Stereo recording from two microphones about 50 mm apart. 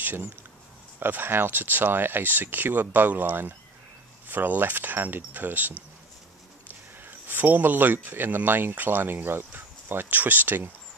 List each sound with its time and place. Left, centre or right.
0.9 s speech: right
7.1 s speech: right